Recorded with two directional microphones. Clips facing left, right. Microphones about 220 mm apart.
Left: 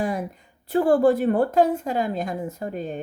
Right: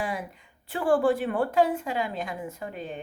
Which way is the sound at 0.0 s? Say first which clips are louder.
Left 6 dB; 40° left (ahead or behind).